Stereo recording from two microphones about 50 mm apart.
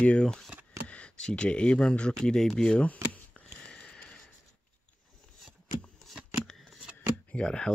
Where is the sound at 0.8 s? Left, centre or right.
Left.